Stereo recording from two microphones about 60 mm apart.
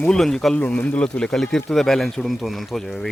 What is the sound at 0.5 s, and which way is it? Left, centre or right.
Speech, left.